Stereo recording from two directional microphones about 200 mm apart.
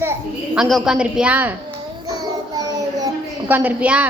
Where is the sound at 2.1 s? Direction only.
15° right (ahead or behind).